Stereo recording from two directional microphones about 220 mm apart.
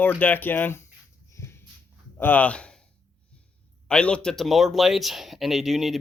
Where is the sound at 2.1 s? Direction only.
10° left (ahead or behind).